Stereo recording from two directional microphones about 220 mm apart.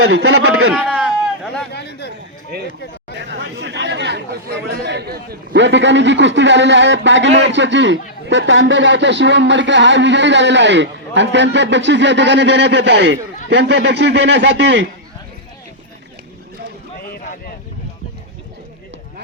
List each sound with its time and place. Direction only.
0.7 s a man's voice: 5° right (ahead or behind)
1.7 s a man's voice: 50° left (ahead or behind)
3.2 s speech: 55° right (ahead or behind)